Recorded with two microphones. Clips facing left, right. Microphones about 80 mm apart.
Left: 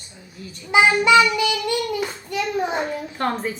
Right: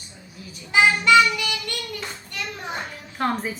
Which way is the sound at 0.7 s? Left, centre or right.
Centre.